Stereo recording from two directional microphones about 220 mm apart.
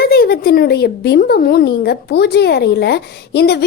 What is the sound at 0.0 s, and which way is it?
Speech, 45° left (ahead or behind).